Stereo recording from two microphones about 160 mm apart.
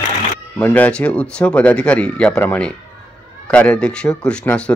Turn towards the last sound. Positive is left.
turn(degrees=5)  # may be behind; listen again after turning